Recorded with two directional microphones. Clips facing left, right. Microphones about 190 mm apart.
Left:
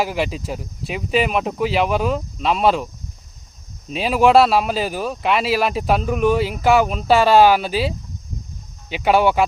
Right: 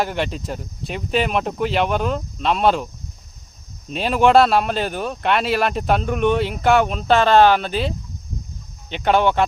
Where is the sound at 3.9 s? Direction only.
Centre (ahead or behind).